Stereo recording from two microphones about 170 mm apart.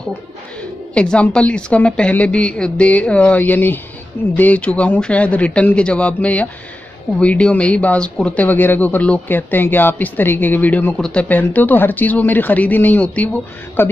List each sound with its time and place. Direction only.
0.6 s speech: 5° left (ahead or behind)